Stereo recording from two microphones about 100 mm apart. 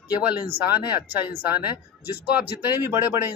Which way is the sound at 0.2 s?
15° right (ahead or behind).